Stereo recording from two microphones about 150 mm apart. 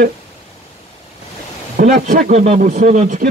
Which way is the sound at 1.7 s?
75° right (ahead or behind).